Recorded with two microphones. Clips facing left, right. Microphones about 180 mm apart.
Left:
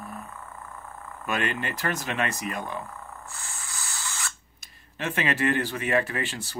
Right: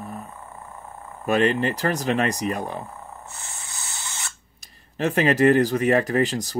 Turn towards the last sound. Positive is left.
turn(degrees=-40)  # may be behind; listen again after turning